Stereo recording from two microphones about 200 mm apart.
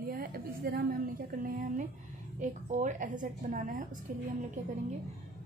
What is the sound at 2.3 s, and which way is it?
A woman's voice, 40° right (ahead or behind).